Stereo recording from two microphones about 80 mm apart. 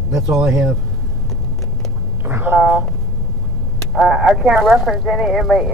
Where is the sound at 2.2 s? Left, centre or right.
Right.